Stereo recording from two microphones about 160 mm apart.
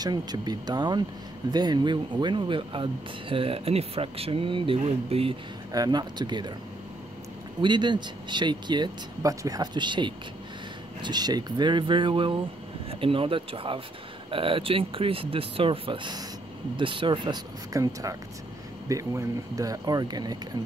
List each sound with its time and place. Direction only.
0.0 s speech: 25° right (ahead or behind)
5.7 s speech: 25° right (ahead or behind)
7.6 s speech: 30° right (ahead or behind)